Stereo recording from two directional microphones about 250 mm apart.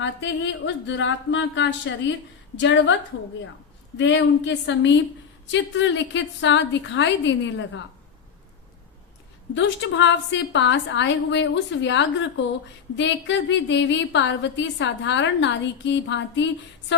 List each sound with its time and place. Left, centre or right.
0.0 s a woman's voice: left
3.9 s a woman's voice: left
9.6 s a woman's voice: left